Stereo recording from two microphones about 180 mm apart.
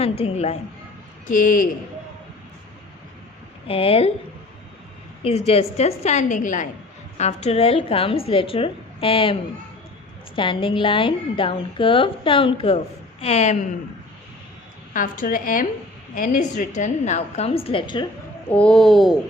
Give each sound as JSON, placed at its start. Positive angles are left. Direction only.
{"t": 0.0, "sound": "a woman's voice", "side_deg": 35}
{"t": 1.3, "sound": "a woman's voice", "side_deg": 50}
{"t": 3.7, "sound": "a woman's voice", "side_deg": 30}
{"t": 5.2, "sound": "a woman's voice", "side_deg": 35}
{"t": 14.9, "sound": "a woman's voice", "side_deg": 50}
{"t": 18.4, "sound": "speech", "side_deg": 5}